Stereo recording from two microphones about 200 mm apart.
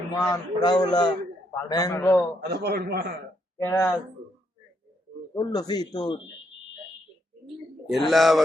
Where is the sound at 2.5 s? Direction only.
55° right (ahead or behind).